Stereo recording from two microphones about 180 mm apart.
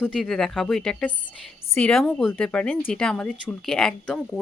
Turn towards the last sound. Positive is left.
turn(degrees=5)  # may be behind; listen again after turning